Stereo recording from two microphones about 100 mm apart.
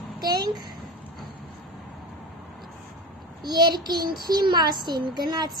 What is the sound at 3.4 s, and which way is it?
A child's voice, 45° right (ahead or behind).